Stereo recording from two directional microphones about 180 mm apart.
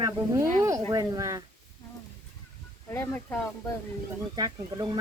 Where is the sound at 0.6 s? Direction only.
20° right (ahead or behind).